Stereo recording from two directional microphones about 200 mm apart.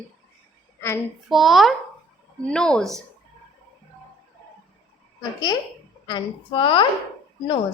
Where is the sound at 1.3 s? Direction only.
Centre (ahead or behind).